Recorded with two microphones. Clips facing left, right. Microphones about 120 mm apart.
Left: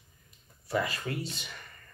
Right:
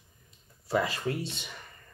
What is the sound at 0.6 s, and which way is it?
Speech, 30° right (ahead or behind).